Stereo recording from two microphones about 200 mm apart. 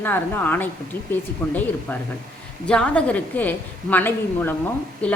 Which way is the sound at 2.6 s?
5° left (ahead or behind).